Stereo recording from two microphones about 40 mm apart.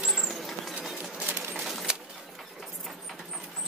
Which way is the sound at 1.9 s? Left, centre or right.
Right.